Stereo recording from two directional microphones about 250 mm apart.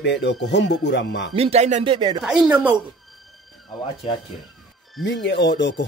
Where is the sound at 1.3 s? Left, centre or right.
Right.